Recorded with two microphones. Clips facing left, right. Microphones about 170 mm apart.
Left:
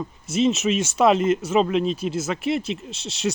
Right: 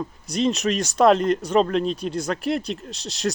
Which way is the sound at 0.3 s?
Centre (ahead or behind).